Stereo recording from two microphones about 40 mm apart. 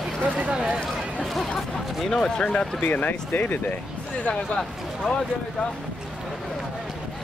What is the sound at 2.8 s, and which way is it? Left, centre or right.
Speech, left.